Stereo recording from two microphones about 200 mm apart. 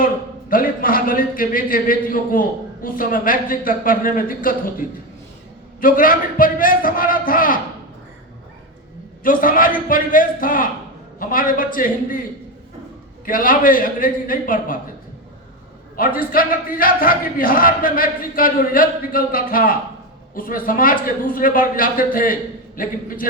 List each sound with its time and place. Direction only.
0.0 s a man's voice: 45° left (ahead or behind)
9.2 s a man's voice: 45° left (ahead or behind)
13.2 s a man's voice: 45° left (ahead or behind)
16.0 s a man's voice: 45° left (ahead or behind)